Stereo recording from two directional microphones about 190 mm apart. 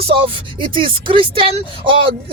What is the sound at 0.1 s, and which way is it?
Speech, 30° right (ahead or behind).